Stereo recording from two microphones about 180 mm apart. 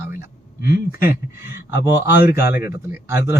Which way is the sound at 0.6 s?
55° left (ahead or behind).